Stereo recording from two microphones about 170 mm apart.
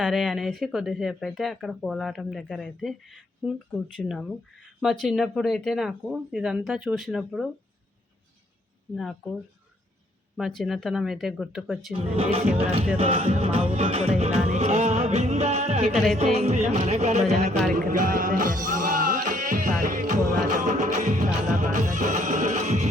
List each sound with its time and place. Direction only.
0.0 s speech: centre (ahead or behind)
10.3 s speech: centre (ahead or behind)
11.9 s music: 35° right (ahead or behind)
16.1 s speech: 40° right (ahead or behind)
19.8 s music: 50° right (ahead or behind)